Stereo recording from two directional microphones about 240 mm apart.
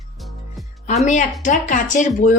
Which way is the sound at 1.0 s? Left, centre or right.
Left.